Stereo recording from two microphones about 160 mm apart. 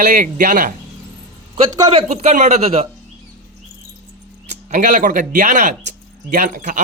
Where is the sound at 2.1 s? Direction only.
45° right (ahead or behind).